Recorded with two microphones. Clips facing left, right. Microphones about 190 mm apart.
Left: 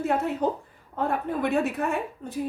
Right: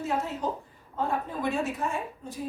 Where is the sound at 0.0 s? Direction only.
60° left (ahead or behind).